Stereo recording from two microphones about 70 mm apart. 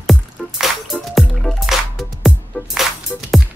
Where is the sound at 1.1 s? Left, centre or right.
Centre.